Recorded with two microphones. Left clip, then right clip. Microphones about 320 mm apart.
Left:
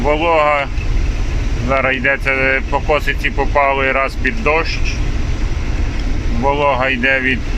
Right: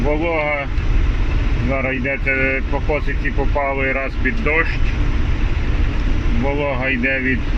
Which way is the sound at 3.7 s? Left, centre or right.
Left.